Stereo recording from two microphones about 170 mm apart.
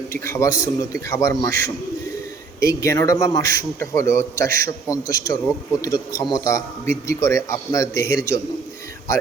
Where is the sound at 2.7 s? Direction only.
20° left (ahead or behind).